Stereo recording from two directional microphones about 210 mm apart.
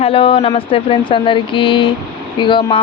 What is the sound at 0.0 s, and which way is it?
Speech, 25° left (ahead or behind).